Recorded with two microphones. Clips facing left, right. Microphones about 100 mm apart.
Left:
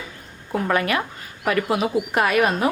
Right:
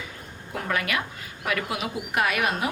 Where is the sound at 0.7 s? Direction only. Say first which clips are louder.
Left 5 dB; 35° left (ahead or behind).